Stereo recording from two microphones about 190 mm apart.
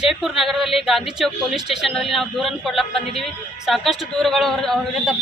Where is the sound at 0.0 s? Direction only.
Centre (ahead or behind).